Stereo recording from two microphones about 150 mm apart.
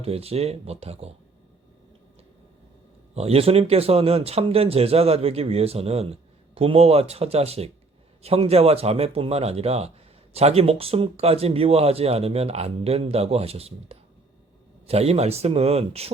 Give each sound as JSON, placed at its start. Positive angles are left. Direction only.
{"t": 0.0, "sound": "speech", "side_deg": -40}
{"t": 3.2, "sound": "speech", "side_deg": -40}